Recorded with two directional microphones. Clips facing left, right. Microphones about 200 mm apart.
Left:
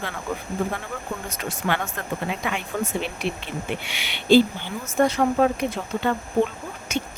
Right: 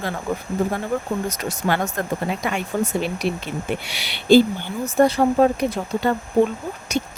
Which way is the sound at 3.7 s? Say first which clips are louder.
Right 3 dB; 35° right (ahead or behind).